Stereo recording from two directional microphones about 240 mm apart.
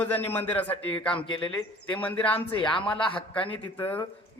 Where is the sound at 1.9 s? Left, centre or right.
Centre.